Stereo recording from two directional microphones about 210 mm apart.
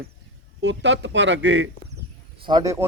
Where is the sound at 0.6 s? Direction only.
55° right (ahead or behind).